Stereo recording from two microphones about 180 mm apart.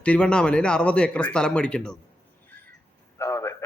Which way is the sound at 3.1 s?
15° left (ahead or behind).